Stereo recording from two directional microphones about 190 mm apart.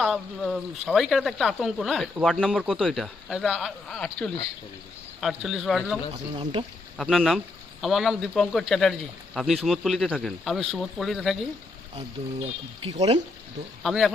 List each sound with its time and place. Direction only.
0.0 s speech: centre (ahead or behind)
6.3 s speech: 25° right (ahead or behind)
6.9 s speech: centre (ahead or behind)
11.9 s speech: 30° right (ahead or behind)
13.8 s speech: centre (ahead or behind)